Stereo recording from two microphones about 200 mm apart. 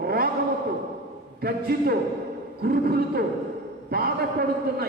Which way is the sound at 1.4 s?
50° right (ahead or behind).